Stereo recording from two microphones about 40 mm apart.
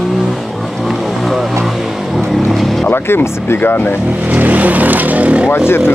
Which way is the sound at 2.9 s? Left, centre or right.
Left.